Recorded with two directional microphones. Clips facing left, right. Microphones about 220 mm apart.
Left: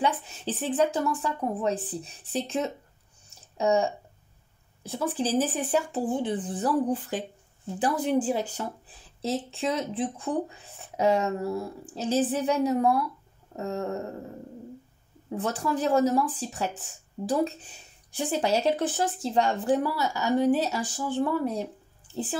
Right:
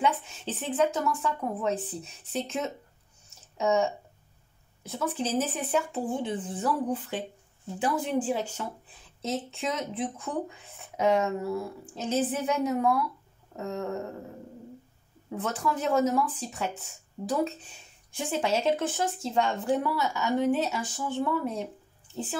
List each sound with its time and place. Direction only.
0.0 s speech: 35° left (ahead or behind)
15.3 s speech: 30° left (ahead or behind)
18.1 s speech: 35° left (ahead or behind)